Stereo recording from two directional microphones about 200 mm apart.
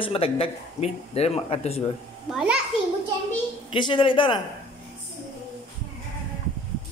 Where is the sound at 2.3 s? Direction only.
Centre (ahead or behind).